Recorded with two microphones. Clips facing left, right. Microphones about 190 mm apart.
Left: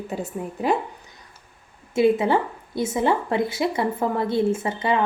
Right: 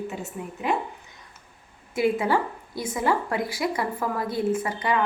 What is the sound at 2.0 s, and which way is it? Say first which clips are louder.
A woman's voice: left 4 dB; 25° left (ahead or behind).